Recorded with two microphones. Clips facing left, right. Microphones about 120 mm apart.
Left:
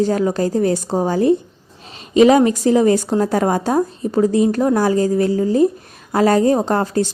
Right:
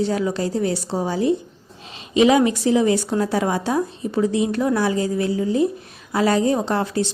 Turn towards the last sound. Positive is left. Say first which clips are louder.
# left 4 dB
turn(degrees=45)  # may be behind; listen again after turning